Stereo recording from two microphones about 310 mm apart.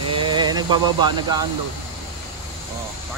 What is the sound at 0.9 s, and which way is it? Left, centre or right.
Speech, centre.